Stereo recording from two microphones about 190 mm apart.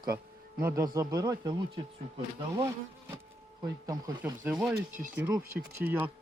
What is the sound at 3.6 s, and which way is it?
Speech, 20° right (ahead or behind).